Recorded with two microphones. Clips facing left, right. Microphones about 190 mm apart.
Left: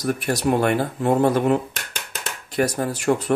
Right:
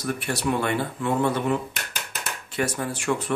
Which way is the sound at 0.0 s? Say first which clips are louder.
Left 5 dB; 40° left (ahead or behind).